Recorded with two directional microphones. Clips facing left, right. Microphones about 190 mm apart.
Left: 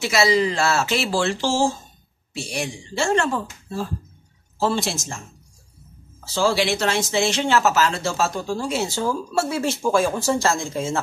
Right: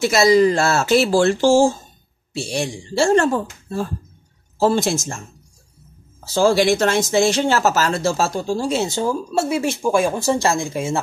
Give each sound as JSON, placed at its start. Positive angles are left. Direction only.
{"t": 0.0, "sound": "speech", "side_deg": -45}
{"t": 2.3, "sound": "speech", "side_deg": -30}
{"t": 4.6, "sound": "speech", "side_deg": -45}
{"t": 6.3, "sound": "speech", "side_deg": -45}
{"t": 8.4, "sound": "speech", "side_deg": -30}